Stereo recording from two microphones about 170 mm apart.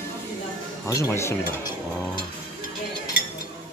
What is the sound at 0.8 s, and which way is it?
Speech, 15° left (ahead or behind).